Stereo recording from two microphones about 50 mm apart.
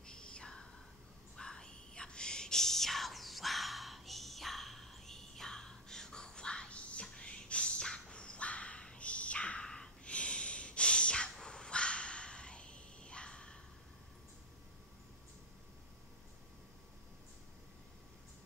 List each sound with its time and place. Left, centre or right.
0.0 s whispering: centre
11.3 s dog: centre